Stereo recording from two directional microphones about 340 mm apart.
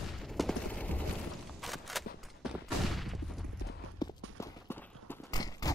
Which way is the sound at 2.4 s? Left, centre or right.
Centre.